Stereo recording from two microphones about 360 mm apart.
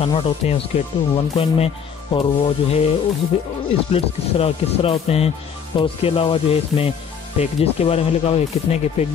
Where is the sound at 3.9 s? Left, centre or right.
Centre.